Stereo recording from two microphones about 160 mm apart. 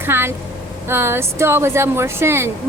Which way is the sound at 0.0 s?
15° right (ahead or behind).